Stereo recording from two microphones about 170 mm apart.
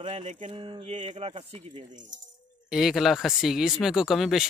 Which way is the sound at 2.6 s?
5° right (ahead or behind).